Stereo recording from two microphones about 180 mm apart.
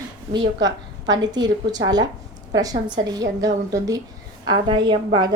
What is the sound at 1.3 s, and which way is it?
A woman's voice, 20° right (ahead or behind).